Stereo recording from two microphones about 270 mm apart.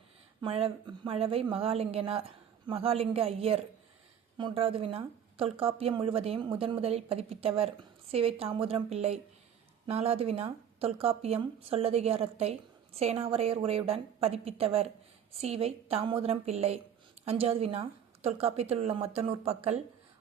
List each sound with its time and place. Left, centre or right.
0.4 s a woman's voice: right